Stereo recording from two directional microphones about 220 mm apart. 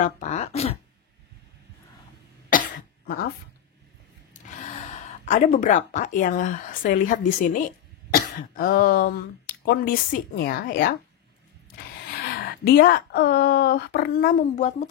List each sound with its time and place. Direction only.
0.0 s speech: 30° left (ahead or behind)
2.5 s cough: 40° left (ahead or behind)
5.2 s speech: 35° left (ahead or behind)
12.6 s speech: 45° left (ahead or behind)